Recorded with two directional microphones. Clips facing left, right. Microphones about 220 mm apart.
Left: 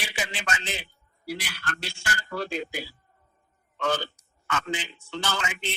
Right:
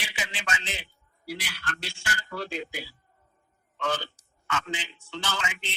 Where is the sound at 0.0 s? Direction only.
45° left (ahead or behind).